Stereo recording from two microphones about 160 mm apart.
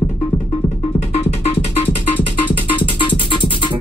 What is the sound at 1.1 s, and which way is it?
Music, 40° left (ahead or behind).